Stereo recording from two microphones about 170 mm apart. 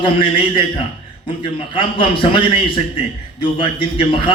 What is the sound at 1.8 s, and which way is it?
A man's voice, 30° left (ahead or behind).